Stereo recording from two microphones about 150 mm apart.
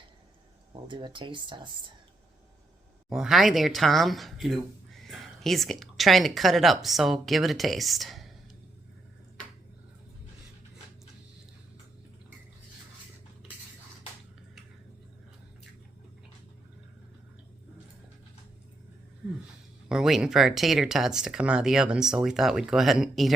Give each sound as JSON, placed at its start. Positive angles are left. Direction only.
{"t": 0.7, "sound": "speech", "side_deg": -30}
{"t": 3.1, "sound": "speech", "side_deg": -5}
{"t": 19.9, "sound": "speech", "side_deg": -5}